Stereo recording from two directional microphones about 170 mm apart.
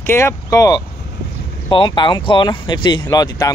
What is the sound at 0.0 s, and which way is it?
Speech, 15° left (ahead or behind).